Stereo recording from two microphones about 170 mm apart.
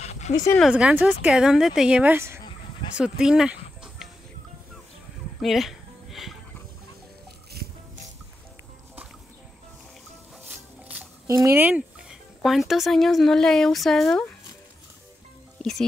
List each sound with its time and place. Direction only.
0.0 s dog: 40° left (ahead or behind)
0.6 s speech: 5° right (ahead or behind)
3.0 s speech: 5° right (ahead or behind)
5.4 s music: centre (ahead or behind)
7.6 s music: 65° right (ahead or behind)
10.9 s music: 15° right (ahead or behind)
12.4 s speech: centre (ahead or behind)